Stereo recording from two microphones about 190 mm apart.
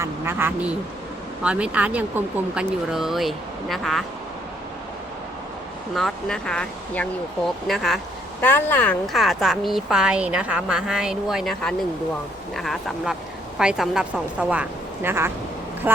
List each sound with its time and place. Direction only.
0.0 s a woman's voice: 10° right (ahead or behind)
5.9 s a woman's voice: centre (ahead or behind)